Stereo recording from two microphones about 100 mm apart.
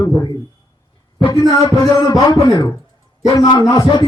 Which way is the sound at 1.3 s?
40° left (ahead or behind).